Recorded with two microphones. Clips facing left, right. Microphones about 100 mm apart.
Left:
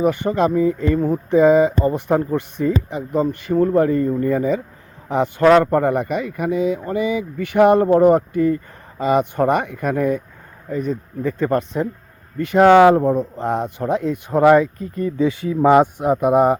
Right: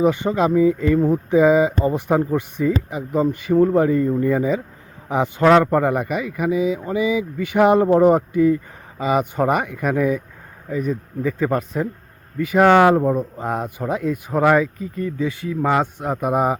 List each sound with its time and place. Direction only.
0.0 s speech: 20° right (ahead or behind); by 15.1 s centre (ahead or behind)
15.2 s speech: 25° left (ahead or behind)
16.1 s speech: centre (ahead or behind)